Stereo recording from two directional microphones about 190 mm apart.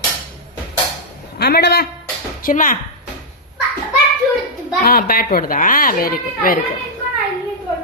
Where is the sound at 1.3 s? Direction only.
60° left (ahead or behind).